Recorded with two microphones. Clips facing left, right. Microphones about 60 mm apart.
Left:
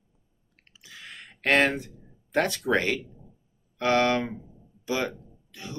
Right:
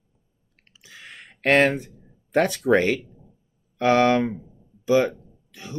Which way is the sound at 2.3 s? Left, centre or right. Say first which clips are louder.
Right 5 dB; right.